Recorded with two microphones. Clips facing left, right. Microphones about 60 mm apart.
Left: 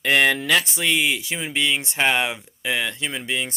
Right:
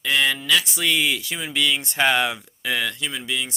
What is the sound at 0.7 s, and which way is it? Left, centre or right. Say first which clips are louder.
A man's voice: left 1 dB; left.